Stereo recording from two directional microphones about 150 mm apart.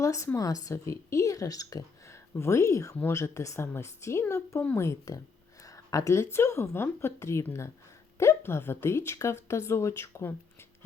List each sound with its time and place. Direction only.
0.0 s speech: 20° left (ahead or behind)